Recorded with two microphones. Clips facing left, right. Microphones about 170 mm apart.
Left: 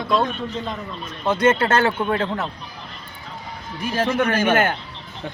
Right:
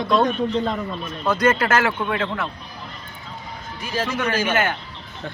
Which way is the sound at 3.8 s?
55° left (ahead or behind).